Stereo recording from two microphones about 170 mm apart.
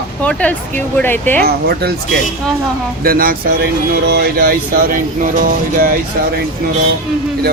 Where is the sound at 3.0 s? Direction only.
60° right (ahead or behind).